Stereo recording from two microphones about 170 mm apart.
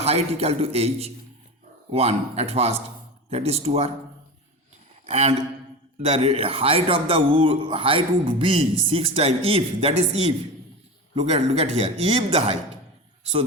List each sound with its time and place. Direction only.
0.0 s a man's voice: 35° right (ahead or behind)
5.0 s a sound: 40° right (ahead or behind)
6.0 s a man's voice: 40° right (ahead or behind)